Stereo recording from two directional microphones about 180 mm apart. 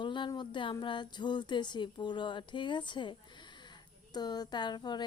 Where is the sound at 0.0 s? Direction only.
25° left (ahead or behind).